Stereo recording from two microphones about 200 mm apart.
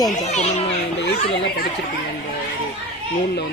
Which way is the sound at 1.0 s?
65° left (ahead or behind).